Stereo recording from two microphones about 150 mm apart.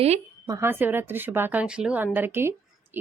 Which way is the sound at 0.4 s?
20° right (ahead or behind).